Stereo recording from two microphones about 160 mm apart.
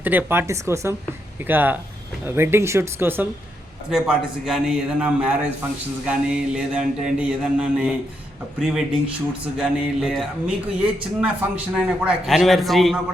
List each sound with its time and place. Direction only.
0.0 s speech: 10° right (ahead or behind)
3.8 s mantra: 5° right (ahead or behind)